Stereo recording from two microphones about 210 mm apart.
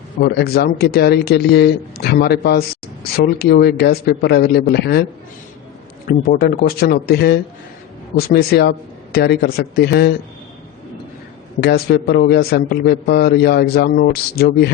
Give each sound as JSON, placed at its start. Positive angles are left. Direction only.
{"t": 0.2, "sound": "speech", "side_deg": 45}
{"t": 6.1, "sound": "speech", "side_deg": 45}
{"t": 11.6, "sound": "speech", "side_deg": 50}